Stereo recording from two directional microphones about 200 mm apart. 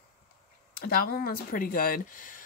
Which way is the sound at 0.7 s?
45° left (ahead or behind).